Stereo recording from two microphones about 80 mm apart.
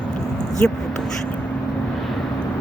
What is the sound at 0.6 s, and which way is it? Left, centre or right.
Speech, centre.